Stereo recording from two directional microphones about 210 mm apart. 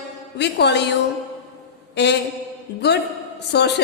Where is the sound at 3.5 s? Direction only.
50° left (ahead or behind).